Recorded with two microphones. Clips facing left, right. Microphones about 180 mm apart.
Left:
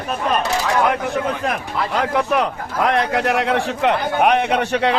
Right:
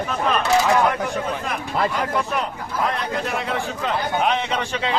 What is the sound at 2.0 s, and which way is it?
A man's voice, 70° left (ahead or behind).